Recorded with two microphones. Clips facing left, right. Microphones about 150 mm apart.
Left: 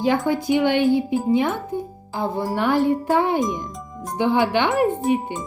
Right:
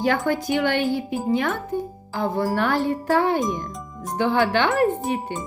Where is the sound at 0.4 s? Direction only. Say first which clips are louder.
Left 4 dB; 20° left (ahead or behind).